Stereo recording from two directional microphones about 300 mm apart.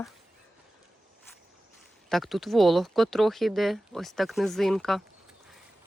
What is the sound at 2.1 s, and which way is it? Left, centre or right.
Speech, centre.